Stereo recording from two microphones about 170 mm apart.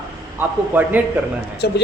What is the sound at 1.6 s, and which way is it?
Speech, 80° left.